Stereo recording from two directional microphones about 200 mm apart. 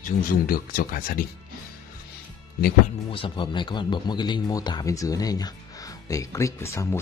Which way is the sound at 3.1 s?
25° left (ahead or behind).